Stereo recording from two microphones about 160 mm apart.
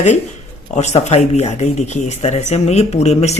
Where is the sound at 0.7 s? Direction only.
45° left (ahead or behind).